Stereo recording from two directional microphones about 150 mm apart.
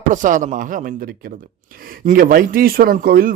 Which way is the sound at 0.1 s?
60° right (ahead or behind).